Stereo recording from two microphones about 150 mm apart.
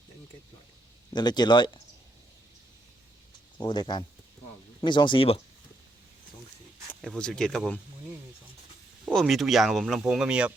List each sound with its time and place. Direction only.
1.1 s speech: 30° left (ahead or behind)
3.6 s speech: 30° left (ahead or behind)
7.0 s speech: 5° left (ahead or behind)
9.1 s speech: centre (ahead or behind)